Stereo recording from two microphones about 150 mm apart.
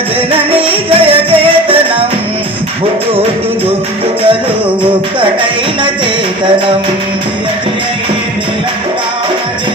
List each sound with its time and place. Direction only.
0.3 s music: 35° right (ahead or behind)